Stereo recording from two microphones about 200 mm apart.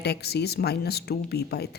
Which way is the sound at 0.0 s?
55° left (ahead or behind).